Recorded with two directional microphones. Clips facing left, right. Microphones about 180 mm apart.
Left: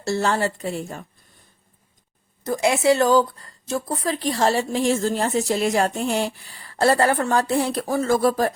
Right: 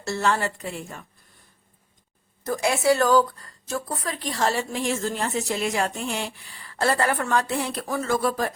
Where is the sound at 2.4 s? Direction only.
20° left (ahead or behind).